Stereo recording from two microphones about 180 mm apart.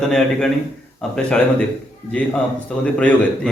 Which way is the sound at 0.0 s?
5° left (ahead or behind).